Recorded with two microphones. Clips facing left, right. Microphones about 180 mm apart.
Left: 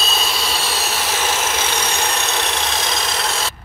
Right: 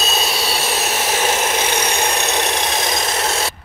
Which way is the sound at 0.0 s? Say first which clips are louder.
Right 2 dB; 15° right (ahead or behind).